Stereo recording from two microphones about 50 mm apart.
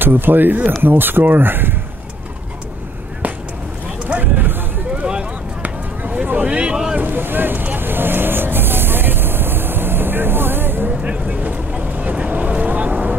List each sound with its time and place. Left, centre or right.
0.0 s speech: right
4.1 s a sound: right
5.6 s a sound: right
6.2 s speech: right
7.0 s vehicle: right
11.0 s speech: right
11.8 s vehicle: right